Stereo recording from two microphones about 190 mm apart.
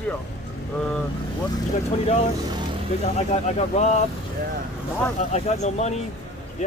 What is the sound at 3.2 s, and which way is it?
Speech, 35° left (ahead or behind).